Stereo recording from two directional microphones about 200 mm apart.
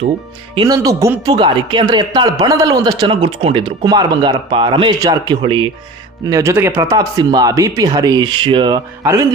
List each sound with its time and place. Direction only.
0.5 s a man's voice: 20° right (ahead or behind)